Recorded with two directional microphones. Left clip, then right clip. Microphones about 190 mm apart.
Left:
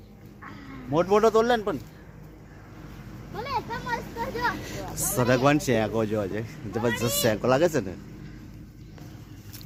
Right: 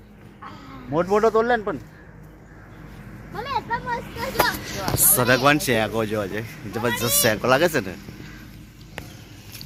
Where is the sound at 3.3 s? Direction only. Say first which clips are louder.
Right 3 dB; 15° right (ahead or behind).